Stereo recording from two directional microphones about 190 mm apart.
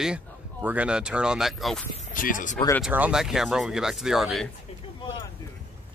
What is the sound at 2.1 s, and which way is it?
Speech, 45° left (ahead or behind).